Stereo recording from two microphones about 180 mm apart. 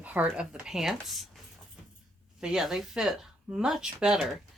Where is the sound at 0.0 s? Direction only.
10° right (ahead or behind).